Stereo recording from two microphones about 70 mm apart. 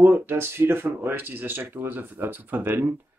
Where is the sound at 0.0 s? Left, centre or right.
Right.